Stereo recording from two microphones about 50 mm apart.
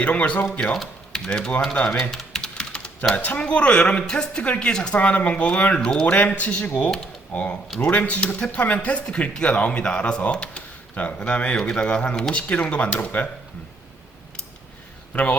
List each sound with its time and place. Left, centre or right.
0.0 s speech: left
0.8 s speech: centre
1.7 s speech: left
2.0 s typing: centre
3.2 s a man's voice: left
4.9 s speech: left
5.7 s speech: centre
6.1 s a man's voice: left
15.1 s speech: left